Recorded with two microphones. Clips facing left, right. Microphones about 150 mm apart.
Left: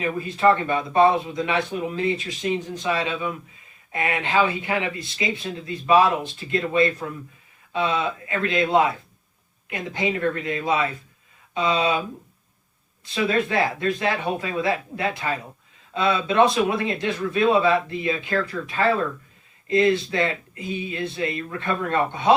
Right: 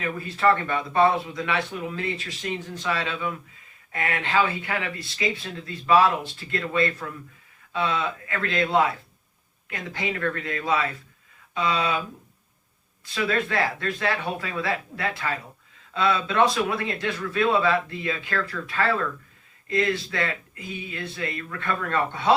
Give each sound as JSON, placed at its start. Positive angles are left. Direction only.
{"t": 0.0, "sound": "speech", "side_deg": 20}
{"t": 13.1, "sound": "speech", "side_deg": 20}